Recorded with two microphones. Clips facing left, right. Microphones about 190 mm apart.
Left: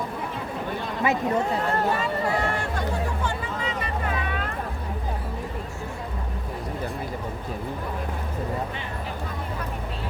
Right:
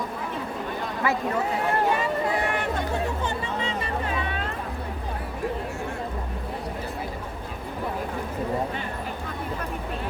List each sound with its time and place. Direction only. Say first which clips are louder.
1.0 s speech: left 2 dB; 20° left (ahead or behind)
3.2 s music: right 1 dB; 25° right (ahead or behind)